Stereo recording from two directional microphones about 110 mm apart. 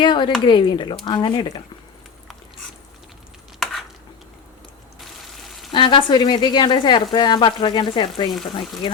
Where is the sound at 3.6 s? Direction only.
Centre (ahead or behind).